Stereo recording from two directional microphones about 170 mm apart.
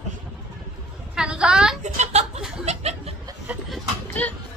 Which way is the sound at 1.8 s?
40° right (ahead or behind).